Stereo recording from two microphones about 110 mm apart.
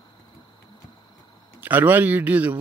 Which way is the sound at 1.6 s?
15° right (ahead or behind).